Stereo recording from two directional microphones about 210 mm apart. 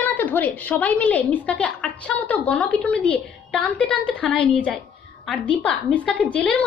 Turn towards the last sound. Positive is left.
turn(degrees=5)  # may be behind; listen again after turning